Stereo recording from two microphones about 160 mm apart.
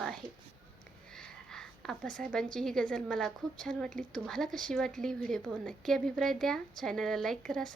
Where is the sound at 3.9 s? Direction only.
55° right (ahead or behind).